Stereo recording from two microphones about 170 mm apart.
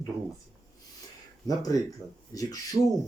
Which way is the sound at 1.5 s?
20° left (ahead or behind).